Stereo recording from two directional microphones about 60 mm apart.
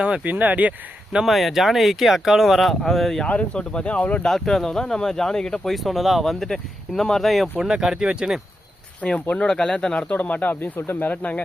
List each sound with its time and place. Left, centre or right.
0.0 s speech: centre
0.3 s speech: right
1.2 s speech: centre
3.2 s speech: centre
4.3 s speech: centre
5.7 s speech: centre
7.6 s speech: centre
9.0 s speech: left
10.1 s speech: left
11.1 s speech: left